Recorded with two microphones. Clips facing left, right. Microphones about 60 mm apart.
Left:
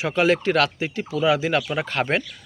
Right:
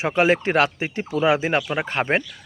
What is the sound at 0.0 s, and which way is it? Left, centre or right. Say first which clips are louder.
Speech: right 1 dB; right.